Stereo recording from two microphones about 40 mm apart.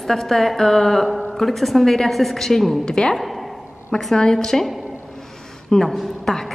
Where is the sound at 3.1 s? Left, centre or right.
Centre.